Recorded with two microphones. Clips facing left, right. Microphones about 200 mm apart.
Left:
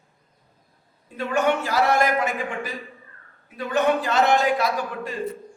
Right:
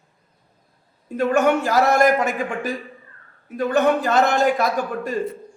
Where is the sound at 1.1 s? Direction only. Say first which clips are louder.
Right 5 dB; 45° right (ahead or behind).